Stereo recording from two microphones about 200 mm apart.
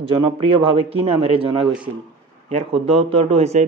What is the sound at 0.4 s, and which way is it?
A man's voice, 30° right (ahead or behind).